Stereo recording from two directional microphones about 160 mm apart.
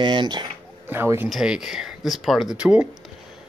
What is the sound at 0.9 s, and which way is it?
Speech, 15° right (ahead or behind).